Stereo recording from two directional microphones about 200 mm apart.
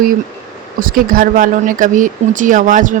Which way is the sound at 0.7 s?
45° right (ahead or behind).